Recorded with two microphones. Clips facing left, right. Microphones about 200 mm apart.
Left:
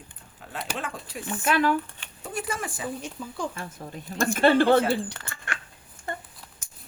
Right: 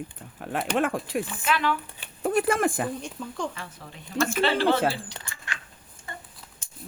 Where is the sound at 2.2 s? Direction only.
55° right (ahead or behind).